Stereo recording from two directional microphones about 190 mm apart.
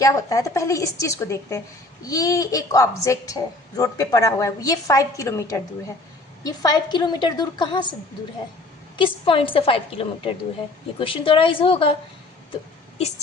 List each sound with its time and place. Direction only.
0.0 s a woman's voice: 15° left (ahead or behind)
9.0 s a woman's voice: 25° left (ahead or behind)
13.0 s speech: 35° left (ahead or behind)